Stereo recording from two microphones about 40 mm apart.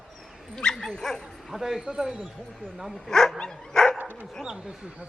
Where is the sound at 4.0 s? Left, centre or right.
Right.